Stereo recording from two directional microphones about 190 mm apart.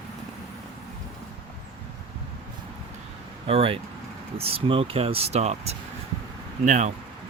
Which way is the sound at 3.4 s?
30° right (ahead or behind).